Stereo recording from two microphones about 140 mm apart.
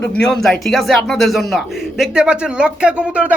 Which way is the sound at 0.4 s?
Centre (ahead or behind).